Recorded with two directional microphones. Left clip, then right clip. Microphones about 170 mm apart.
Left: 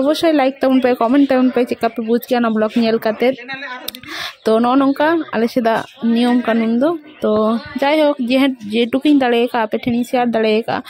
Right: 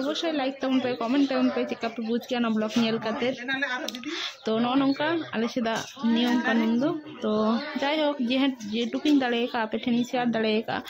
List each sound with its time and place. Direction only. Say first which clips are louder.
0.0 s speech: left 14 dB; 55° left (ahead or behind)
4.5 s speech: left 12 dB; 45° left (ahead or behind)